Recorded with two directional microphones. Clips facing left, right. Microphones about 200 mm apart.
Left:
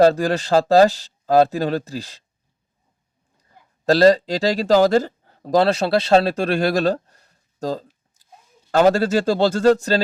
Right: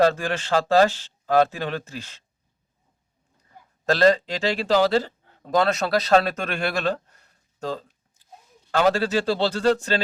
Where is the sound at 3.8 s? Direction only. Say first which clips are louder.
Left 5 dB; 35° left (ahead or behind).